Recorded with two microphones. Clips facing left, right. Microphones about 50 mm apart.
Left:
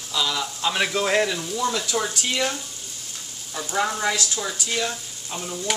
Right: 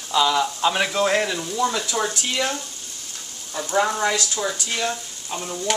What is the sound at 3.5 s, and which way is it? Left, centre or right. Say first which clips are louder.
Speech: right 3 dB; centre.